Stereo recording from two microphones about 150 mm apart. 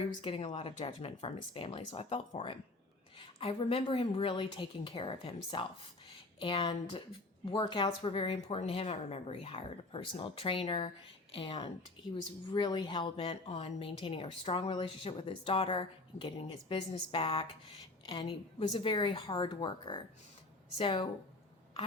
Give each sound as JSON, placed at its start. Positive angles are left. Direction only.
{"t": 0.0, "sound": "a woman's voice", "side_deg": 35}